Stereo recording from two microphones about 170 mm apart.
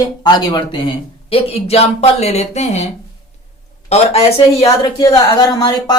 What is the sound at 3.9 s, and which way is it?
Speech, 40° left (ahead or behind).